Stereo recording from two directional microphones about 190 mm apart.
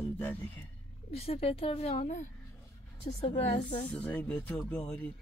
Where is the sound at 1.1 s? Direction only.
30° left (ahead or behind).